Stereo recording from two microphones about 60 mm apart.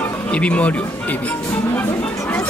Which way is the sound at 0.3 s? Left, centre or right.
Left.